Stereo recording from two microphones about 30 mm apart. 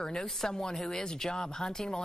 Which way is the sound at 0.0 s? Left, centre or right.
Left.